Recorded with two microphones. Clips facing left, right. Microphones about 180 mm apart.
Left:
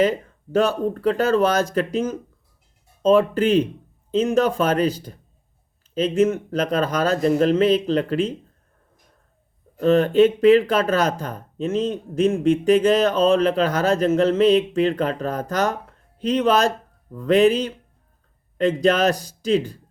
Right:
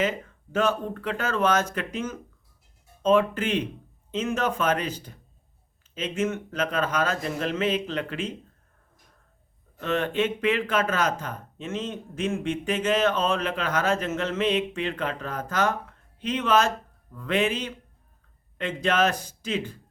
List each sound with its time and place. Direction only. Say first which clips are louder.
0.5 s speech: left 5 dB; 35° left (ahead or behind)
9.8 s speech: left 10 dB; 35° left (ahead or behind)